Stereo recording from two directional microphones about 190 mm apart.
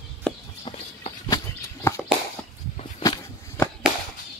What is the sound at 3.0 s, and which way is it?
Walk, 15° left (ahead or behind).